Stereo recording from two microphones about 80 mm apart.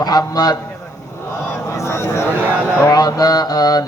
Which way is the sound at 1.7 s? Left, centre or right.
Left.